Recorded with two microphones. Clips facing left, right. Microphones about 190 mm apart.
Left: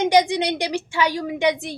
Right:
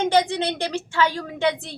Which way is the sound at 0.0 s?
15° left (ahead or behind).